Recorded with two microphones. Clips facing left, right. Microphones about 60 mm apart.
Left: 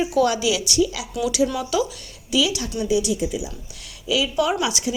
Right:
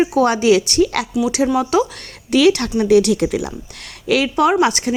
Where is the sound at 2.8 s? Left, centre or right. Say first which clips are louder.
Right 8 dB; right.